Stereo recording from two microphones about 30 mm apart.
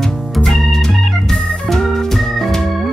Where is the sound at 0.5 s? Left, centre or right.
Centre.